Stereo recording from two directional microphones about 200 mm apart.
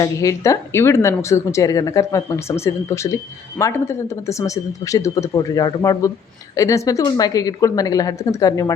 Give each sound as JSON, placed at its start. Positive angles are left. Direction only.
{"t": 0.0, "sound": "speech", "side_deg": 15}